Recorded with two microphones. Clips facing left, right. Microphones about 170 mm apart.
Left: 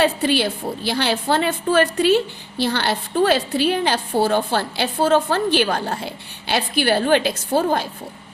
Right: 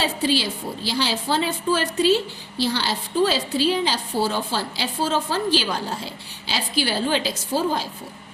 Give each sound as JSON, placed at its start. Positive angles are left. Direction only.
{"t": 0.0, "sound": "a woman's voice", "side_deg": 60}